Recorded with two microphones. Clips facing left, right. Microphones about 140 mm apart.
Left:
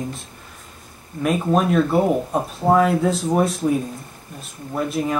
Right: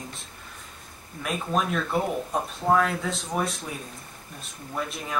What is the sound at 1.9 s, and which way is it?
Speech, 55° left (ahead or behind).